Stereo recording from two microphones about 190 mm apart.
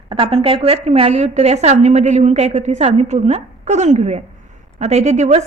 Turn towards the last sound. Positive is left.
turn(degrees=-35)  # may be behind; listen again after turning